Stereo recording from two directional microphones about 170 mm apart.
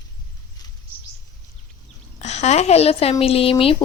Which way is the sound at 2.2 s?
40° left (ahead or behind).